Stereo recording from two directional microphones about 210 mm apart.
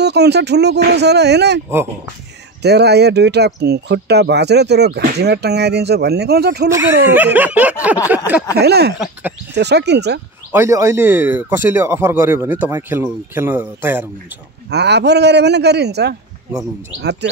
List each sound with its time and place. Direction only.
0.0 s speech: 55° right (ahead or behind)
2.6 s speech: 50° right (ahead or behind)
6.7 s speech: 10° right (ahead or behind)
8.5 s speech: 50° right (ahead or behind)
10.5 s speech: 15° right (ahead or behind)
14.7 s speech: 55° right (ahead or behind)